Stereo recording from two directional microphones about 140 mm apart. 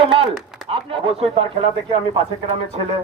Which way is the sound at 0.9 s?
45° right (ahead or behind).